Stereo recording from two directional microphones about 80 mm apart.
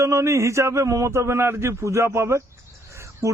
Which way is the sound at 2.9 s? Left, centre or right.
Right.